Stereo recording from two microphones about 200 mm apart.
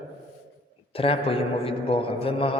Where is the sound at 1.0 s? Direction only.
30° left (ahead or behind).